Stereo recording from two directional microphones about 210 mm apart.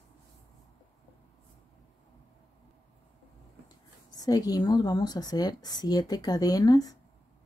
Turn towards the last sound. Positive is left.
turn(degrees=20)  # may be behind; listen again after turning